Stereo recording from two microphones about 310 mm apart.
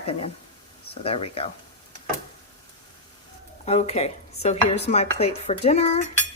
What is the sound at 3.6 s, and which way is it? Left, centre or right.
Speech, left.